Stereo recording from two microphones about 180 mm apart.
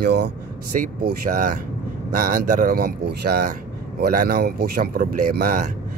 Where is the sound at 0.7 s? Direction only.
45° right (ahead or behind).